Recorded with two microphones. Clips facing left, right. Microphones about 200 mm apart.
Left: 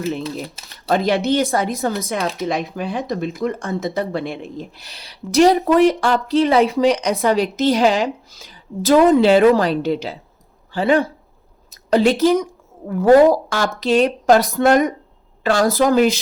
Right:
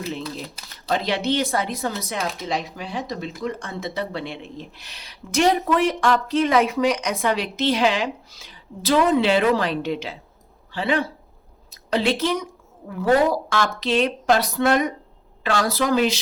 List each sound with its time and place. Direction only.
0.0 s a woman's voice: 50° left (ahead or behind)